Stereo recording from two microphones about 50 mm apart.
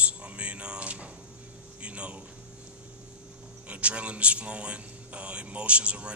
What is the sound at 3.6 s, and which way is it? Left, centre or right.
A man's voice, right.